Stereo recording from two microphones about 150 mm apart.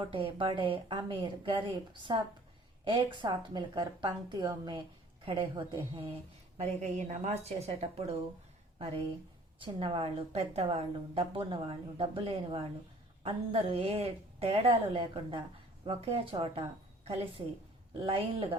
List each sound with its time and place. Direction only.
0.0 s a woman's voice: 35° right (ahead or behind)
6.6 s a woman's voice: 50° right (ahead or behind)
9.6 s a woman's voice: 35° right (ahead or behind)